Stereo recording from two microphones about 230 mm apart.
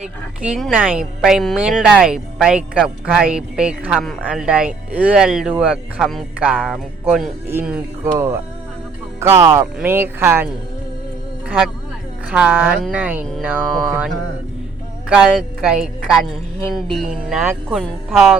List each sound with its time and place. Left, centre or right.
0.0 s speech: centre
9.2 s speech: centre
15.1 s speech: centre